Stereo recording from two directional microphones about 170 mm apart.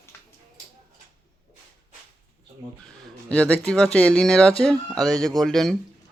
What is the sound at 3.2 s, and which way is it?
Speech, 5° left (ahead or behind).